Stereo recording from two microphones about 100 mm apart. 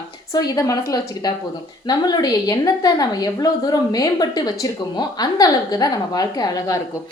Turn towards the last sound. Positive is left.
turn(degrees=40)  # may be behind; listen again after turning